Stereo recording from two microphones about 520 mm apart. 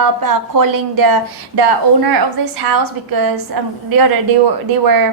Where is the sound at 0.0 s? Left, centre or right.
Right.